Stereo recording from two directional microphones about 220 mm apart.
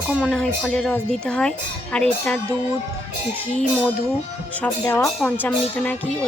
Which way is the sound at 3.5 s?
5° left (ahead or behind).